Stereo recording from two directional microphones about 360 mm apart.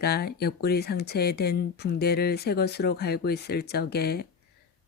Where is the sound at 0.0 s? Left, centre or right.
Left.